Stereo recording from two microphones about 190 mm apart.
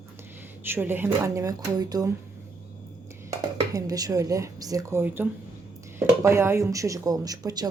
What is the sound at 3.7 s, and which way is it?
Speech, 20° right (ahead or behind).